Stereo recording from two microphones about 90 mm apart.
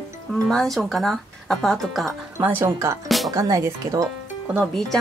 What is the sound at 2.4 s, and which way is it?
Speech, 20° right (ahead or behind).